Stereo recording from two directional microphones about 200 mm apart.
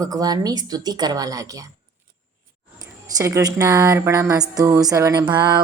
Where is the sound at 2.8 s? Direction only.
15° right (ahead or behind).